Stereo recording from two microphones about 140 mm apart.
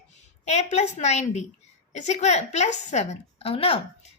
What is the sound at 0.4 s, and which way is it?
A woman's voice, 55° left (ahead or behind).